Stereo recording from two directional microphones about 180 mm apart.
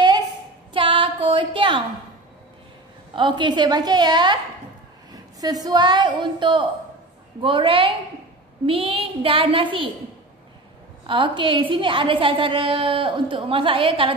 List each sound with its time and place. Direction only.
0.7 s music: 30° right (ahead or behind)
3.2 s a woman's voice: 25° right (ahead or behind)
5.4 s a woman's voice: 20° right (ahead or behind)
11.1 s a woman's voice: 25° right (ahead or behind)